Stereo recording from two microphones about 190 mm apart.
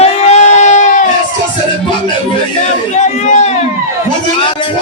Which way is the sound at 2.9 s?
35° left (ahead or behind).